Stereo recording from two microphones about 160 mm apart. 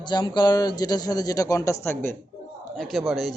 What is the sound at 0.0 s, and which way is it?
Speech, 30° left (ahead or behind).